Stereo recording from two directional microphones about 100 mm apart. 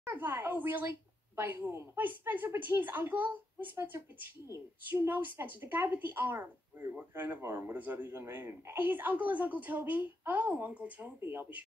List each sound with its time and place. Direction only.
0.1 s speech: 20° right (ahead or behind)